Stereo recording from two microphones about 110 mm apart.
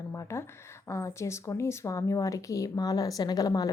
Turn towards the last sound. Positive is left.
turn(degrees=35)  # may be behind; listen again after turning